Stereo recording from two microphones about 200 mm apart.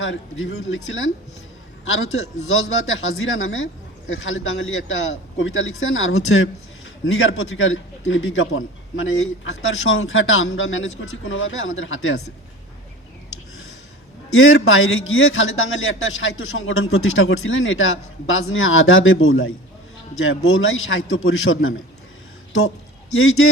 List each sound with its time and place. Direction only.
0.0 s a man's voice: 70° left (ahead or behind)
14.3 s a man's voice: 85° left
23.1 s a man's voice: 85° left